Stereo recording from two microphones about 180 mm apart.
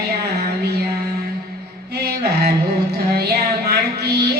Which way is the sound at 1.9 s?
65° right (ahead or behind).